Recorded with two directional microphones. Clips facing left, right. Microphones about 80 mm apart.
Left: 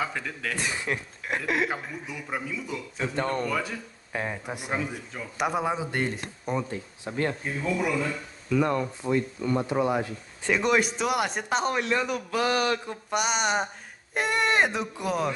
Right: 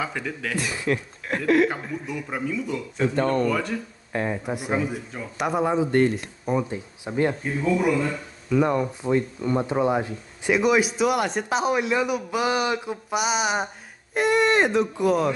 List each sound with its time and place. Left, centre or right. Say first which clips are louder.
0.0 s speech: right 2 dB; centre
0.9 s speech: right 5 dB; centre
1.7 s speech: right 4 dB; centre
6.7 s speech: right 4 dB; centre
8.5 s speech: right 3 dB; centre
10.5 s speech: right 4 dB; centre